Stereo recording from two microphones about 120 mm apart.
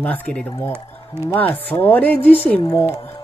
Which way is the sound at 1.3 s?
15° left (ahead or behind).